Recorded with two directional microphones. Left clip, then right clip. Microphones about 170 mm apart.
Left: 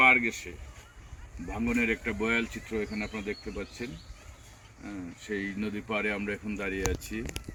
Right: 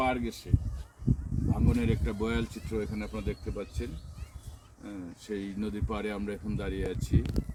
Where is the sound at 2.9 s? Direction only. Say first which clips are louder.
Left 2 dB; 15° left (ahead or behind).